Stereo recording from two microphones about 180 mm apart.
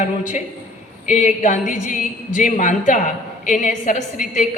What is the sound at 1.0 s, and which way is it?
A woman's voice, 45° left (ahead or behind).